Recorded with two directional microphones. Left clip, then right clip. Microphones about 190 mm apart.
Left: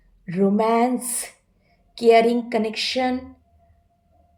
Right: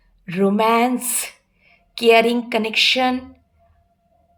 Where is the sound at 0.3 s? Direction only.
20° left (ahead or behind).